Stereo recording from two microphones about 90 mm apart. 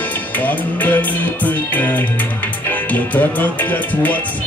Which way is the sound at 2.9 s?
20° left (ahead or behind).